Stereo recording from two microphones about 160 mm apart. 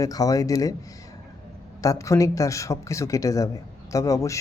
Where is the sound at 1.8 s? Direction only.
20° left (ahead or behind).